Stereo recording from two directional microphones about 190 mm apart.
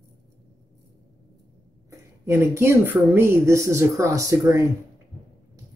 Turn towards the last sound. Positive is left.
turn(degrees=-15)  # may be behind; listen again after turning